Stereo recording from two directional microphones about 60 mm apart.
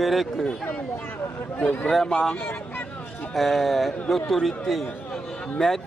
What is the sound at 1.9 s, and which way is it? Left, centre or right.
Speech, centre.